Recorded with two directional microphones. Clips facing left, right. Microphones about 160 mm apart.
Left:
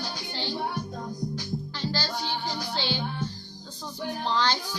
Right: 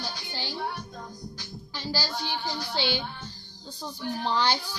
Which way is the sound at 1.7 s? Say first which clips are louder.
Right 2 dB; 5° right (ahead or behind).